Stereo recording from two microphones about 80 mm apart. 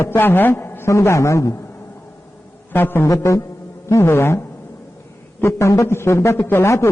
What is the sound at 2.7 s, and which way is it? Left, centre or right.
Speech, left.